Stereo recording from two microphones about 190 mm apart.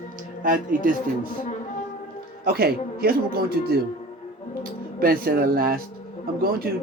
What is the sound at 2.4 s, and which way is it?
Speech, 55° right (ahead or behind).